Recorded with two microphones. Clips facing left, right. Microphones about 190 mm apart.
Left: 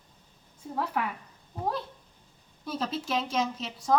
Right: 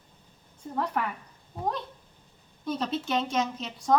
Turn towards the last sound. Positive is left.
turn(degrees=0)  # may be behind; listen again after turning